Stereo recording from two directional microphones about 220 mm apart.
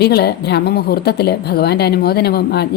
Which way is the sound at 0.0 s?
45° left (ahead or behind).